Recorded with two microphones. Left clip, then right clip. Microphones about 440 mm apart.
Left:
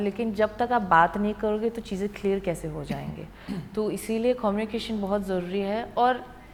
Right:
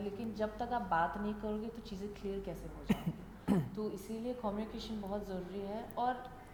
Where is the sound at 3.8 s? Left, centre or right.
Left.